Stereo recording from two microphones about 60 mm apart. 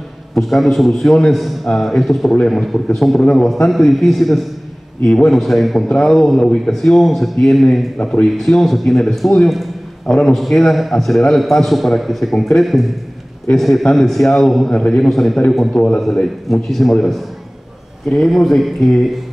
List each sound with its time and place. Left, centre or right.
0.3 s a man's voice: centre
8.0 s a man's voice: centre
8.3 s a man's voice: centre
14.7 s a man's voice: centre